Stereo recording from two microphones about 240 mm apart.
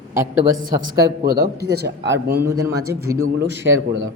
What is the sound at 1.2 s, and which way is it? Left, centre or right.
Speech, right.